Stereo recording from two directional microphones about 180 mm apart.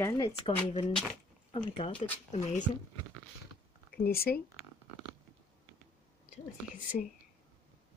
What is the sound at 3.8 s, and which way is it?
Speech, 55° left (ahead or behind).